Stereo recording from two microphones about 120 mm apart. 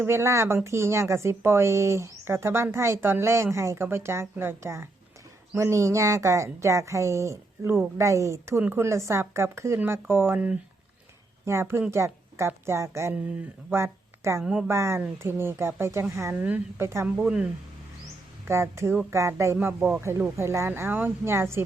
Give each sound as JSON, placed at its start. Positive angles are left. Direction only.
{"t": 0.0, "sound": "speech", "side_deg": -20}
{"t": 14.4, "sound": "speech", "side_deg": -5}
{"t": 14.7, "sound": "speech", "side_deg": -20}
{"t": 18.4, "sound": "speech", "side_deg": -20}